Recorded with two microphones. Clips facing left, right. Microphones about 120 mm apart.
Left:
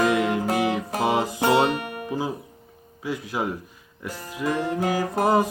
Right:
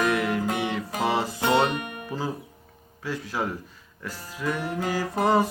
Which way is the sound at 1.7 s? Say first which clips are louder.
Left 2 dB; 35° left (ahead or behind).